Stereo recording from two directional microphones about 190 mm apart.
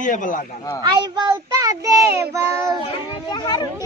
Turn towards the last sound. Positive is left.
turn(degrees=20)  # may be behind; listen again after turning